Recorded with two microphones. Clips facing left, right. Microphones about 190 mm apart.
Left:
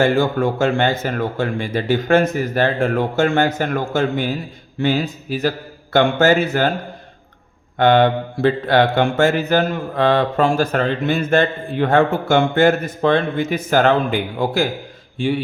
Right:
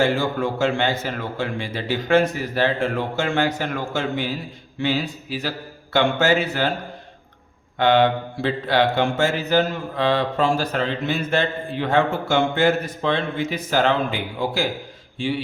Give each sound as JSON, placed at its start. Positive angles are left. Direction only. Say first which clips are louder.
{"t": 0.0, "sound": "speech", "louder": "left 4 dB", "side_deg": 50}
{"t": 7.8, "sound": "speech", "louder": "left 3 dB", "side_deg": 50}